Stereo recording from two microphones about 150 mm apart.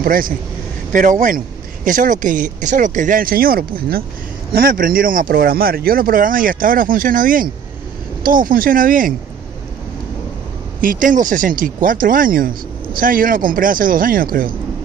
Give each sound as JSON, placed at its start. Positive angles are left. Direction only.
{"t": 0.0, "sound": "speech", "side_deg": -70}
{"t": 0.9, "sound": "speech", "side_deg": -60}
{"t": 10.8, "sound": "speech", "side_deg": -65}